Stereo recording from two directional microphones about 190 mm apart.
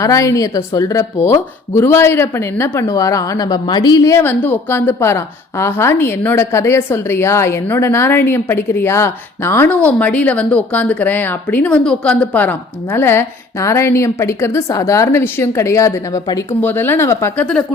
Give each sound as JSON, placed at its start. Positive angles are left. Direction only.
{"t": 0.0, "sound": "a woman's voice", "side_deg": 15}